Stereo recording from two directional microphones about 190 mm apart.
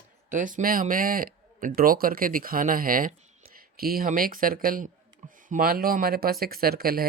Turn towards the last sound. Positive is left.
turn(degrees=-50)  # may be behind; listen again after turning